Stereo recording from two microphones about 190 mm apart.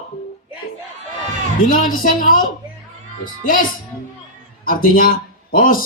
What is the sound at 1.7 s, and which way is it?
Speech, 45° left (ahead or behind).